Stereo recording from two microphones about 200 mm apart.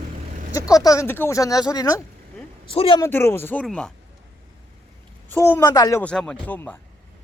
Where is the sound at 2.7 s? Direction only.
25° left (ahead or behind).